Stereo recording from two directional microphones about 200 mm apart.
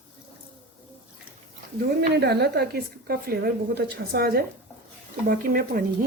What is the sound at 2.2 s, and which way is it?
A woman's voice, 55° right (ahead or behind).